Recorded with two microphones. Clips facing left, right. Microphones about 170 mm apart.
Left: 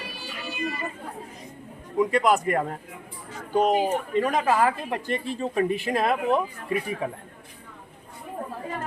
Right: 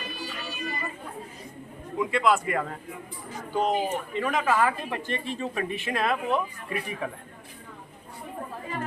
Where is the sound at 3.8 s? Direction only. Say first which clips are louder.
Left 5 dB; 35° left (ahead or behind).